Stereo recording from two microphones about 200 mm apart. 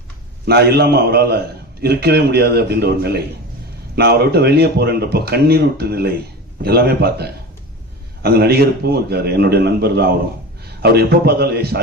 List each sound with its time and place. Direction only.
0.4 s speech: 55° right (ahead or behind)